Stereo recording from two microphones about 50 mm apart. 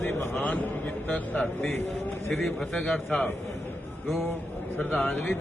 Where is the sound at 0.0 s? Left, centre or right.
Left.